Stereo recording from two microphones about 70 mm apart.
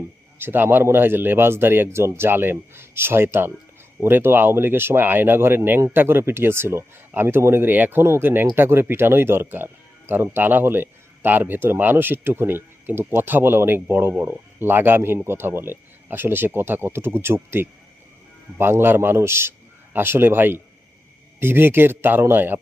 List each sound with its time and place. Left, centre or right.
0.3 s a man's voice: right